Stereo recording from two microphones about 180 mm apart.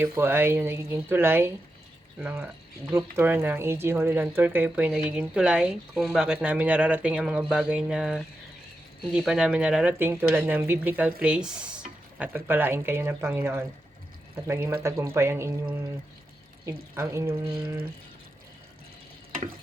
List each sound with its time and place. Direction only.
0.0 s speech: 15° right (ahead or behind)
16.9 s speech: 15° right (ahead or behind)